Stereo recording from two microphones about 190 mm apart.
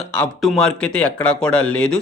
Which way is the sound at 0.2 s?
Centre (ahead or behind).